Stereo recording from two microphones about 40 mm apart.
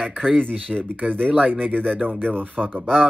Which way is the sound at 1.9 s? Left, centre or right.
Right.